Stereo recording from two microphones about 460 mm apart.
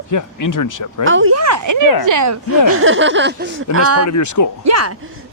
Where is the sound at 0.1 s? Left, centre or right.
Left.